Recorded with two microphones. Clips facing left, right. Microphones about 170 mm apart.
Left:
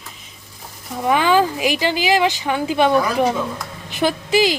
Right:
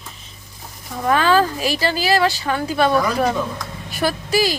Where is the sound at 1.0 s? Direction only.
15° left (ahead or behind).